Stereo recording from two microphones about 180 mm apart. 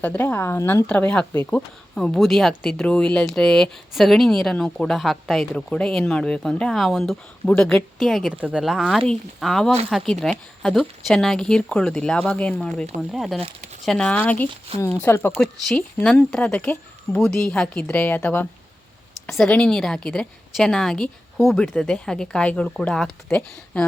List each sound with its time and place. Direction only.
0.0 s speech: 10° left (ahead or behind)